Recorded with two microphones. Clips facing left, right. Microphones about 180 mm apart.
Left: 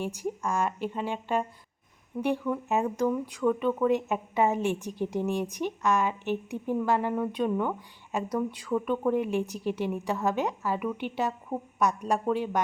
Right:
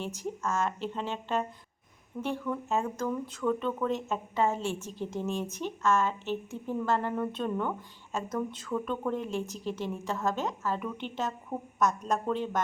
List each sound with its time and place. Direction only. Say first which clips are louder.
0.0 s speech: left 3 dB; 10° left (ahead or behind)